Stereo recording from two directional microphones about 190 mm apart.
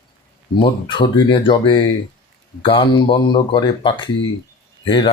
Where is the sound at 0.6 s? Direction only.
25° left (ahead or behind).